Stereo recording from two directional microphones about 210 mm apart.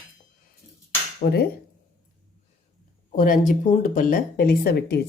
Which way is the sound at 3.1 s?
40° left (ahead or behind).